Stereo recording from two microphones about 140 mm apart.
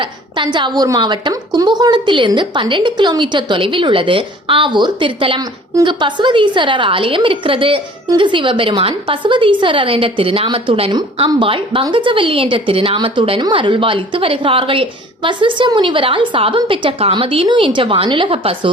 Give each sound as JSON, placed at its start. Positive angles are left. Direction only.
{"t": 0.0, "sound": "a woman's voice", "side_deg": -35}